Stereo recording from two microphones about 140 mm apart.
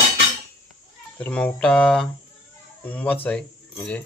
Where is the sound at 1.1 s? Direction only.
10° left (ahead or behind).